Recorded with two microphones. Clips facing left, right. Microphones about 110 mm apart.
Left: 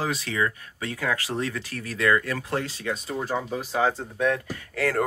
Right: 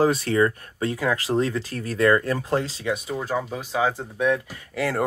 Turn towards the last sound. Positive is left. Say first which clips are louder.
# even
turn(degrees=-15)  # may be behind; listen again after turning